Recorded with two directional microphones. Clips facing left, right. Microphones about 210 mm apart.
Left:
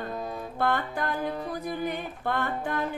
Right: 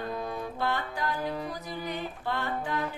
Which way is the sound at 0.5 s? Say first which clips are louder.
Left 7 dB; 55° left (ahead or behind).